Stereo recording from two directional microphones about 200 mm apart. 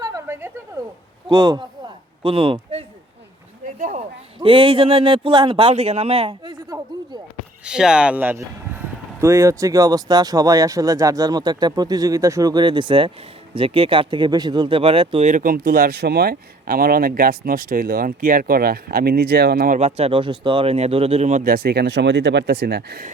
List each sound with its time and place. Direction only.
0.0 s a sound: 15° right (ahead or behind)
1.3 s speech: 20° right (ahead or behind)
3.8 s speech: 40° right (ahead or behind)
4.4 s speech: 25° right (ahead or behind)
7.6 s speech: 5° right (ahead or behind); by 19.8 s 50° right (ahead or behind)
19.8 s speech: 30° right (ahead or behind); by 23.0 s 55° right (ahead or behind)